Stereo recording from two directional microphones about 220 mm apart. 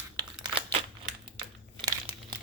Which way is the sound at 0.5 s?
25° right (ahead or behind).